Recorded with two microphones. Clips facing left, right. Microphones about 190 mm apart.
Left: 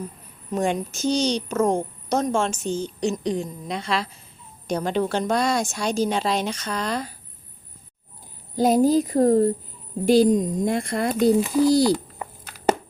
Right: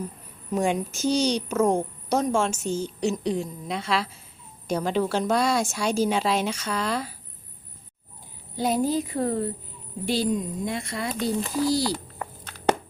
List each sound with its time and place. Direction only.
0.5 s a woman's voice: 10° right (ahead or behind)
8.5 s a woman's voice: 40° left (ahead or behind)
11.2 s a sound: 10° left (ahead or behind)